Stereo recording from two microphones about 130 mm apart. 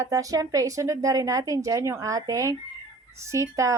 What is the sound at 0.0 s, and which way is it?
A woman's voice, 25° right (ahead or behind).